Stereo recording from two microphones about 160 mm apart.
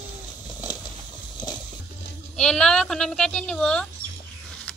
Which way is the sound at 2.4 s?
5° left (ahead or behind).